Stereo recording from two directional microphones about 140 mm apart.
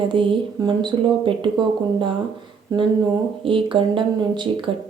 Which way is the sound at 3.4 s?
40° right (ahead or behind).